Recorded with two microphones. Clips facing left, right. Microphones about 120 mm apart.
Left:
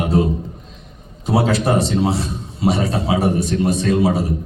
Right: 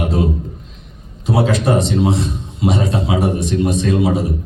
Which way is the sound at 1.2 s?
30° left (ahead or behind).